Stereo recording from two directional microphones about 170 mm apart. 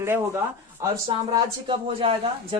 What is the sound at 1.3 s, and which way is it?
A man's voice, 30° right (ahead or behind).